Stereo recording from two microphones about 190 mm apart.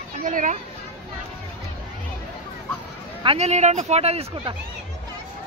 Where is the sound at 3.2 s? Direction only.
30° right (ahead or behind).